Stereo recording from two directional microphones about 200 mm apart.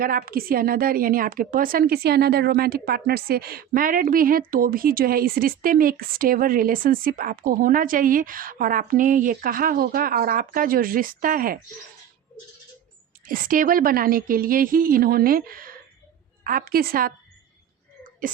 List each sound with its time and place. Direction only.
0.0 s a woman's voice: 45° right (ahead or behind)
13.2 s a woman's voice: 45° right (ahead or behind)